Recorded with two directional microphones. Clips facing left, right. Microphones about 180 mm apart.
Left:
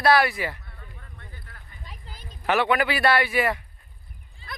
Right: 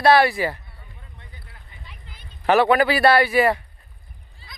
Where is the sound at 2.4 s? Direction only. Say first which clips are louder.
Right 6 dB; 35° right (ahead or behind).